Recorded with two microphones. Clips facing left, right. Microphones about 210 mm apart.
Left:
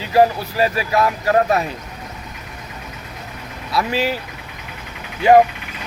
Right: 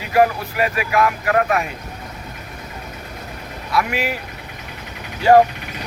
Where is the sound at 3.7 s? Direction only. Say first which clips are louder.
Left 1 dB; 30° left (ahead or behind).